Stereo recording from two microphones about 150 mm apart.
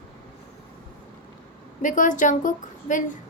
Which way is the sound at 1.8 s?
60° left (ahead or behind).